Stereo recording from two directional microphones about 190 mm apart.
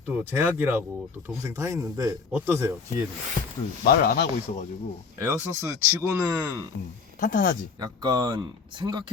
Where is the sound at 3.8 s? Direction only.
50° left (ahead or behind).